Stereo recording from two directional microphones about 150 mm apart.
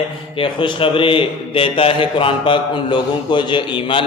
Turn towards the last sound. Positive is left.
turn(degrees=35)  # may be behind; listen again after turning